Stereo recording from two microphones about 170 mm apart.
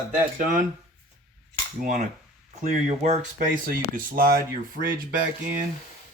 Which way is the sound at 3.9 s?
60° right (ahead or behind).